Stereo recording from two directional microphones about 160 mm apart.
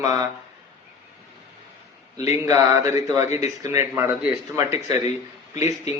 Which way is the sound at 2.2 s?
20° right (ahead or behind).